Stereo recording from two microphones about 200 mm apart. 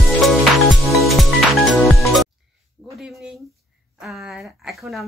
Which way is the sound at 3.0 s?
Centre (ahead or behind).